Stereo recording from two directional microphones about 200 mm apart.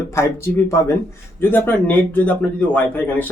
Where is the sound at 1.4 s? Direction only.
10° left (ahead or behind).